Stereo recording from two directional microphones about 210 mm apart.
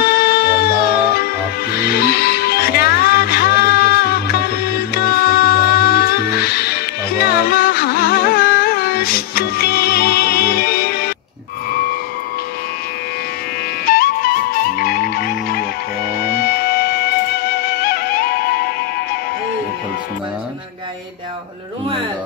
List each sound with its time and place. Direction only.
0.0 s music: 45° left (ahead or behind)
13.8 s music: 45° left (ahead or behind)